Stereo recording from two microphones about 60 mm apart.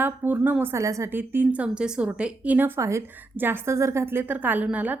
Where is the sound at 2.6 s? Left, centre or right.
Right.